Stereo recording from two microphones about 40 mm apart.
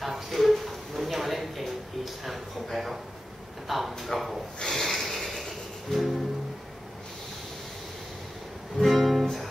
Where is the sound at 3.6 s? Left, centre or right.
Centre.